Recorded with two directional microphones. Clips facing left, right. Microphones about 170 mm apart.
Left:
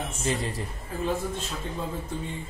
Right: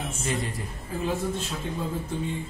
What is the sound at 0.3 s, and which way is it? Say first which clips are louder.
Speech: left 1 dB; 30° left (ahead or behind).